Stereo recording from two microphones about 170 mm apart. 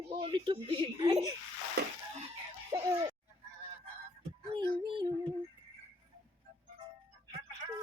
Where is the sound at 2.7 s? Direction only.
20° right (ahead or behind).